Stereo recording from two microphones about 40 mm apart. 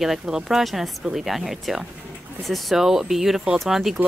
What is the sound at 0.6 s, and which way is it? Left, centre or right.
Speech, centre.